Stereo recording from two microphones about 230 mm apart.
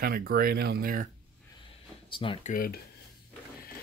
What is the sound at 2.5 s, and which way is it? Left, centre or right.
Speech, left.